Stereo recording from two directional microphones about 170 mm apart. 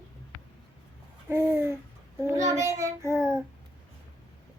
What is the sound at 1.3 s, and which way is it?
A child's voice, 15° right (ahead or behind).